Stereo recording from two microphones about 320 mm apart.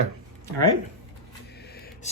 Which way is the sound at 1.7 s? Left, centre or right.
Left.